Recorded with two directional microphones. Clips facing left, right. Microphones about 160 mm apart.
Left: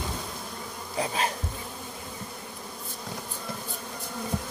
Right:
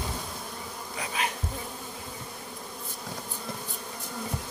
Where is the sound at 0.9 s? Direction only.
30° left (ahead or behind).